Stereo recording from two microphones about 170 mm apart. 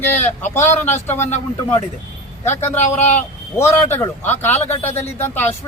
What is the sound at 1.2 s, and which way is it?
Speech, 45° left (ahead or behind).